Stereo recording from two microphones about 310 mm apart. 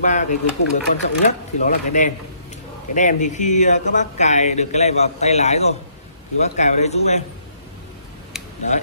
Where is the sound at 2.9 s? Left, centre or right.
Left.